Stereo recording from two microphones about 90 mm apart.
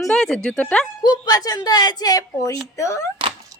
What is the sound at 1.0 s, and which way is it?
Speech, 50° left (ahead or behind).